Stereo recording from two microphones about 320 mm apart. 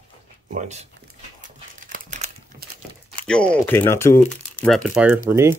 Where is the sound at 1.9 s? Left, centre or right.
Right.